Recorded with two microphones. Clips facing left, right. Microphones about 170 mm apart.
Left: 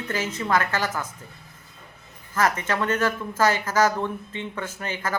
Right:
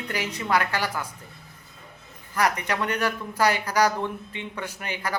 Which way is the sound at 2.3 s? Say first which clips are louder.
Left 1 dB; 15° right (ahead or behind).